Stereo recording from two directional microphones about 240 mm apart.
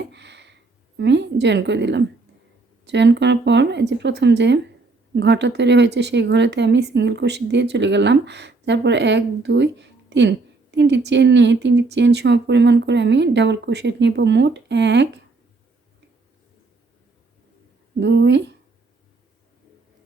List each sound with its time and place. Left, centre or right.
0.1 s a sound: right
0.9 s speech: right
18.0 s speech: right